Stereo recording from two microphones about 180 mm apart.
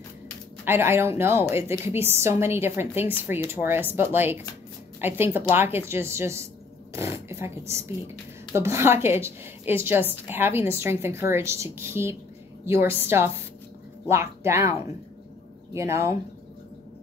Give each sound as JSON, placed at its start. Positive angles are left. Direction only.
{"t": 0.7, "sound": "a woman's voice", "side_deg": -15}